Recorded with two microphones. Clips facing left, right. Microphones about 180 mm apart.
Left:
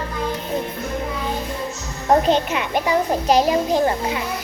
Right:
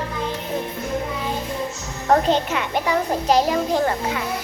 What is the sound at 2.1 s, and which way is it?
A child's voice, 15° left (ahead or behind).